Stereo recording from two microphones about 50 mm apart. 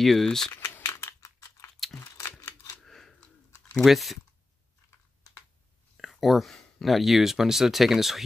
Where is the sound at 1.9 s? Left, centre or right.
Left.